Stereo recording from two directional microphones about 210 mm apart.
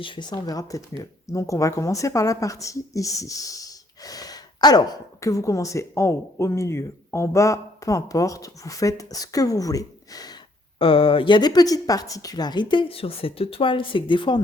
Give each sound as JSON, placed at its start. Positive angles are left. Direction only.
{"t": 0.0, "sound": "a woman's voice", "side_deg": 20}